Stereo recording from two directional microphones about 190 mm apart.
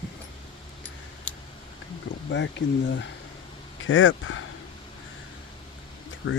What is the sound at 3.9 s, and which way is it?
Speech, 90° left.